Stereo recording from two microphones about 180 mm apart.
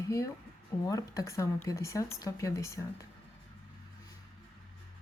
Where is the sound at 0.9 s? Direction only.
20° left (ahead or behind).